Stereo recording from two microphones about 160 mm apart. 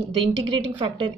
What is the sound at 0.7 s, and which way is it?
Speech, 35° right (ahead or behind).